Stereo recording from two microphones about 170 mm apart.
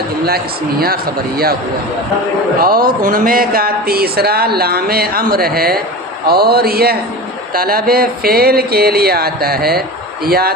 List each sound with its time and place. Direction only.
0.3 s speech: 65° right (ahead or behind)
2.6 s speech: 60° right (ahead or behind)